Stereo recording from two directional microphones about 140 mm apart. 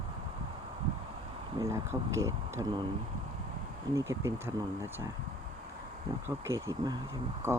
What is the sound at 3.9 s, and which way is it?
Speech, 20° right (ahead or behind).